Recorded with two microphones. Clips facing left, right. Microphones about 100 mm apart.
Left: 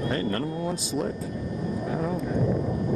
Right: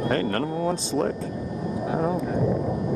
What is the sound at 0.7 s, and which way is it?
Speech, 30° right (ahead or behind).